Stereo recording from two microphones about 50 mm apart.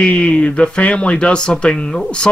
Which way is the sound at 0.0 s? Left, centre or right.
Left.